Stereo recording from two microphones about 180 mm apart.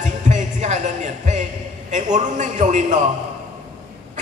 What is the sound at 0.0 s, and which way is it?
Music, 40° right (ahead or behind).